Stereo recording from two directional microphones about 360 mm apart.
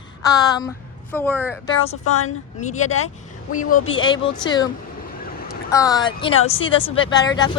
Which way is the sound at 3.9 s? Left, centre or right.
Centre.